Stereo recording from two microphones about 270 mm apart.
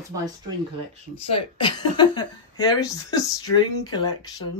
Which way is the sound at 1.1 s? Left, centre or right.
Centre.